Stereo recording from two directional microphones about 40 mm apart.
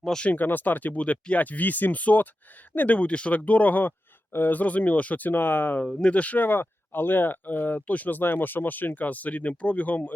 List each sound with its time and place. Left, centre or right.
0.3 s speech: left
4.6 s speech: left
6.0 s speech: left
6.4 s speech: left
8.2 s speech: left